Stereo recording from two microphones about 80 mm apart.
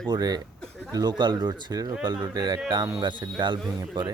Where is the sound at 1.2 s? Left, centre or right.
Right.